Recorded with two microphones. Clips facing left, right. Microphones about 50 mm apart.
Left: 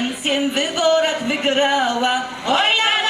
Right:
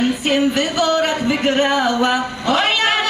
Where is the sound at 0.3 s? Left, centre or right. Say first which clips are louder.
Right 1 dB; left.